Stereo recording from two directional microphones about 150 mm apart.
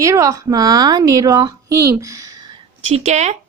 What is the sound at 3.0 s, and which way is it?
Speech, 50° right (ahead or behind).